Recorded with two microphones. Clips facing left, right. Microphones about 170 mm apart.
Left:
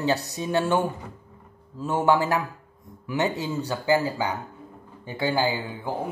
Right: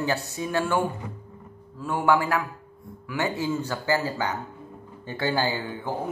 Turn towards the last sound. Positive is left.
turn(degrees=10)  # may be behind; listen again after turning